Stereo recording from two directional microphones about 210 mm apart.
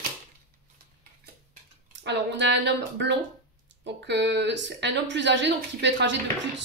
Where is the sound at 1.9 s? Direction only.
55° right (ahead or behind).